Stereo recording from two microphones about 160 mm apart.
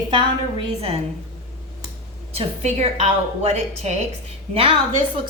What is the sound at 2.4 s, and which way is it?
A woman's voice, 40° right (ahead or behind).